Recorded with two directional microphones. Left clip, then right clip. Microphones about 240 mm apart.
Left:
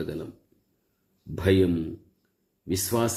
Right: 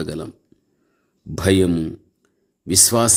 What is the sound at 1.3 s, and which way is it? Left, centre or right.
A man's voice, right.